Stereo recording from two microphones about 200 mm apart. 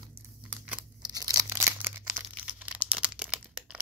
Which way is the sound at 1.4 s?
15° right (ahead or behind).